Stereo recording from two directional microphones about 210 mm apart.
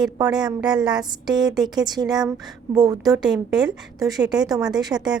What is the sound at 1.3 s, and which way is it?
A woman's voice, 20° right (ahead or behind).